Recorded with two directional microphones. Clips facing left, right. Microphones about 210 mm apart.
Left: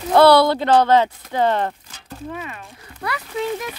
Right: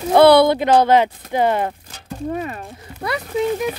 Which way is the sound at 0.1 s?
15° right (ahead or behind).